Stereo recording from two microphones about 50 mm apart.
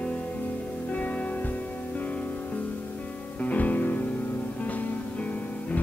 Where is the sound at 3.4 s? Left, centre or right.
Left.